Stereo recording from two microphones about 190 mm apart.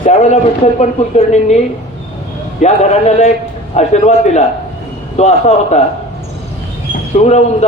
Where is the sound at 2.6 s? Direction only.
35° left (ahead or behind).